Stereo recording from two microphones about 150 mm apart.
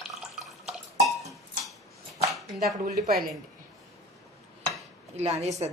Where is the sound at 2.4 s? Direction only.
Centre (ahead or behind).